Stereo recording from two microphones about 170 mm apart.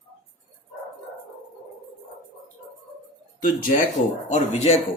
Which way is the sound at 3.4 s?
50° left (ahead or behind).